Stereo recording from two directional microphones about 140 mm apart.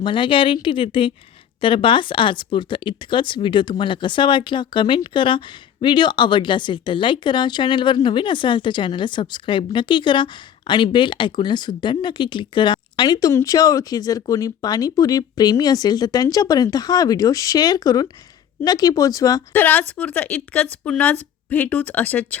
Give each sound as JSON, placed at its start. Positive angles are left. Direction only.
{"t": 0.0, "sound": "speech", "side_deg": 35}
{"t": 19.5, "sound": "speech", "side_deg": 10}